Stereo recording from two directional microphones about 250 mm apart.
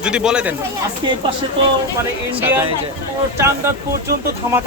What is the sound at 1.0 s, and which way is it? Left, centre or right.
Speech, centre.